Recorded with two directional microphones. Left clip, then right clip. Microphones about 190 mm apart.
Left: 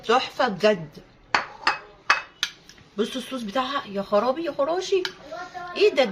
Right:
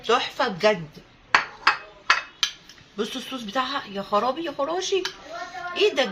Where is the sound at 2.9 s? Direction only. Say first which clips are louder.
Left 2 dB; 15° left (ahead or behind).